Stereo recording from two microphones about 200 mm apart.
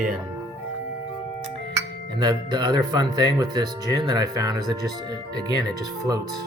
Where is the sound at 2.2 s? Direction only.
20° right (ahead or behind).